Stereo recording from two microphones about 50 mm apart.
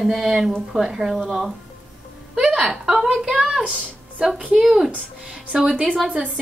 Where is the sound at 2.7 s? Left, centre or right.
Centre.